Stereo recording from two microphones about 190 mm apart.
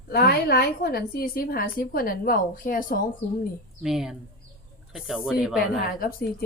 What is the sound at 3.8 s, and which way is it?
Speech, centre (ahead or behind).